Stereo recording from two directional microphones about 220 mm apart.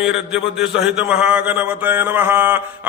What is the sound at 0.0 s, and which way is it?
A man's voice, 5° right (ahead or behind).